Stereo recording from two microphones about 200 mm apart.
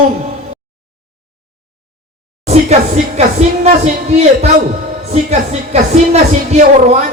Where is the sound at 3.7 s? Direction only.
35° right (ahead or behind).